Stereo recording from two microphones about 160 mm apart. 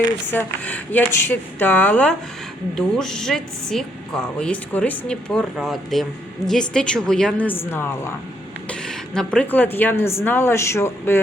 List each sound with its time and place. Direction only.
0.3 s a woman's voice: 10° left (ahead or behind)